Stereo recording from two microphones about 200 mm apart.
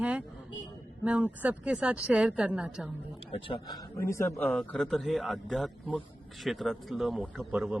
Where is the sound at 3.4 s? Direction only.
20° left (ahead or behind); by 7.7 s 5° right (ahead or behind).